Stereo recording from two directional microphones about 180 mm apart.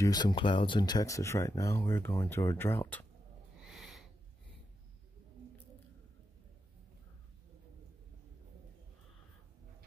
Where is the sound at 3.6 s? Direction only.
Centre (ahead or behind).